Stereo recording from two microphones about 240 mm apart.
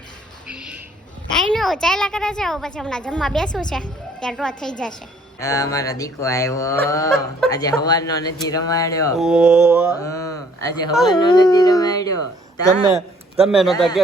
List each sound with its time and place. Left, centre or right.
0.4 s a sound: centre
1.3 s a woman's voice: centre
5.4 s fowl: centre
9.1 s a woman's voice: centre
10.0 s a sound: centre
11.0 s fowl: centre
13.5 s a woman's voice: centre